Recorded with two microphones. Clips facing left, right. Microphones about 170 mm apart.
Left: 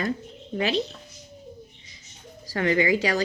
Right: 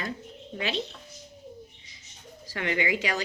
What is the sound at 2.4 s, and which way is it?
Speech, 40° left (ahead or behind).